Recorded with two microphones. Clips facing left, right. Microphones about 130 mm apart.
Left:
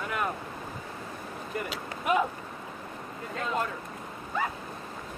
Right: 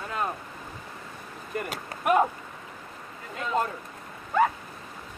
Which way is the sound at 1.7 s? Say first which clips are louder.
Right 4 dB; 50° right (ahead or behind).